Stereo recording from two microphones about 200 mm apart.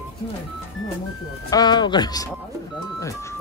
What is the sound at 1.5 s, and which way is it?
Speech, 20° left (ahead or behind).